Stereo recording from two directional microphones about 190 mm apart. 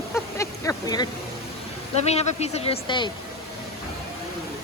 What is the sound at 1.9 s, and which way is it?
Speech, 35° left (ahead or behind).